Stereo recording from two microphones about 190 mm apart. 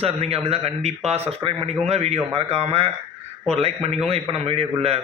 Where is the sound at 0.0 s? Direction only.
30° right (ahead or behind).